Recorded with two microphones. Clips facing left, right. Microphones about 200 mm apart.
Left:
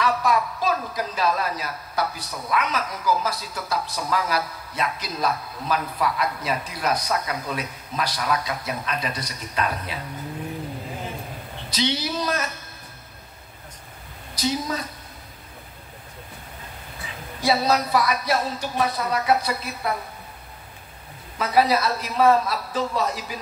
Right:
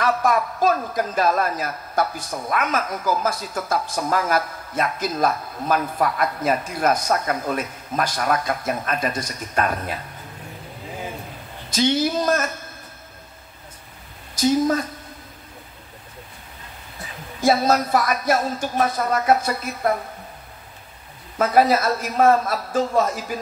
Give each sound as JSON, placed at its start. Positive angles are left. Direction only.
{"t": 0.0, "sound": "a woman's voice", "side_deg": -50}
{"t": 11.7, "sound": "a woman's voice", "side_deg": -50}
{"t": 14.3, "sound": "a woman's voice", "side_deg": -50}
{"t": 17.4, "sound": "a woman's voice", "side_deg": -50}
{"t": 21.4, "sound": "a woman's voice", "side_deg": -50}